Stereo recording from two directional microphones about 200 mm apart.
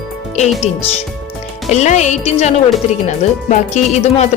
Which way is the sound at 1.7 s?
35° left (ahead or behind).